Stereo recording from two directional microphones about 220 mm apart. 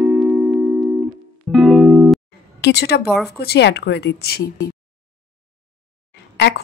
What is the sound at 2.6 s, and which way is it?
A woman's voice, 50° left (ahead or behind).